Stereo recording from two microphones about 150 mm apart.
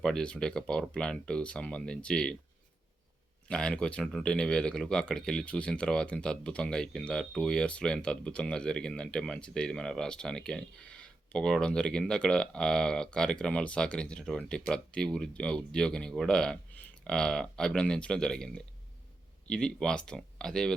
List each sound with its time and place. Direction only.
0.0 s speech: 5° left (ahead or behind)
3.5 s speech: 5° left (ahead or behind)